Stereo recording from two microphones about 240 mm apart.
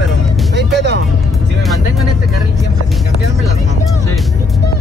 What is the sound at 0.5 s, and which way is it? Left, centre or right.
Music, right.